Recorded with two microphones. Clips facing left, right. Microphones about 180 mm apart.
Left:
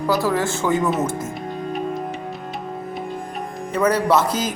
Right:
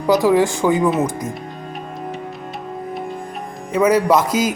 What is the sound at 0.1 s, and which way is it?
Speech, 15° right (ahead or behind).